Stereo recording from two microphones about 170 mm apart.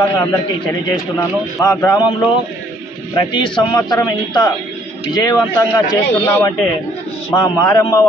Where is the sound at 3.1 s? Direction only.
25° left (ahead or behind).